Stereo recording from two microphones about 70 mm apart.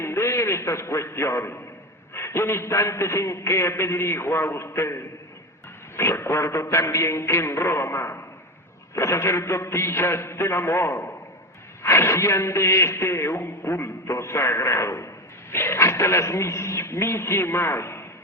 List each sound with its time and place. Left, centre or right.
0.0 s a man's voice: left
6.0 s a man's voice: left